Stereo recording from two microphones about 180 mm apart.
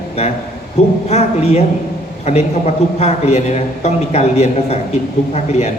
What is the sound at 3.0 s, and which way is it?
A man's voice, 40° left (ahead or behind).